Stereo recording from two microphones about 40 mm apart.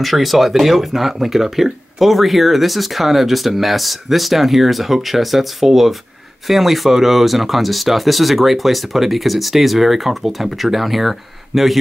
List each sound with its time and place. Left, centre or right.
0.0 s speech: centre